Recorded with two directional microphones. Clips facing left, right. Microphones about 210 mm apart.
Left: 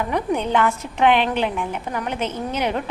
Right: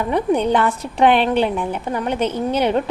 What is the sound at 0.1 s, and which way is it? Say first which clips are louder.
A woman's voice: right 6 dB; 35° right (ahead or behind).